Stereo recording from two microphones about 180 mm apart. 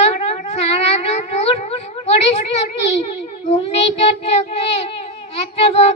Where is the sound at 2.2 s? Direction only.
35° left (ahead or behind).